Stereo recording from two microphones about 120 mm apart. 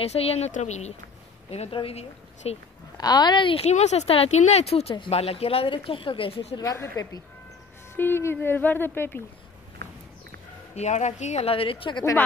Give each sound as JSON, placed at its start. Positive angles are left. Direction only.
{"t": 0.0, "sound": "speech", "side_deg": 55}
{"t": 0.5, "sound": "speech", "side_deg": 75}
{"t": 1.5, "sound": "speech", "side_deg": 55}
{"t": 3.0, "sound": "speech", "side_deg": 35}
{"t": 3.6, "sound": "speech", "side_deg": 65}
{"t": 6.6, "sound": "a woman's voice", "side_deg": 25}
{"t": 10.7, "sound": "speech", "side_deg": 70}